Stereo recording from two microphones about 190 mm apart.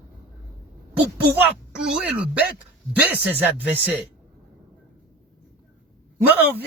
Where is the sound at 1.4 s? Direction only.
5° right (ahead or behind).